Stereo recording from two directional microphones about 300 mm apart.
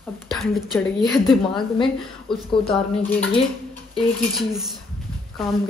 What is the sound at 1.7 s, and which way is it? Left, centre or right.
Speech, centre.